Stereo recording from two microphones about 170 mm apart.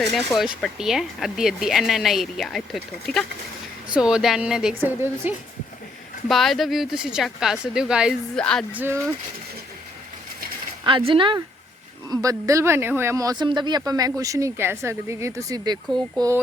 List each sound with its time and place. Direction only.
0.3 s speech: centre (ahead or behind)
6.2 s speech: centre (ahead or behind)
8.7 s speech: 10° right (ahead or behind)
10.8 s speech: 30° right (ahead or behind)